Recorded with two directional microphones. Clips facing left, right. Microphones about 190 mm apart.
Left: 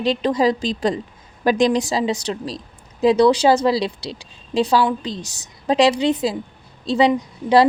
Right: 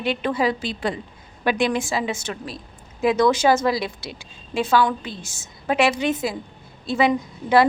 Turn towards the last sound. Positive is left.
turn(degrees=35)  # may be behind; listen again after turning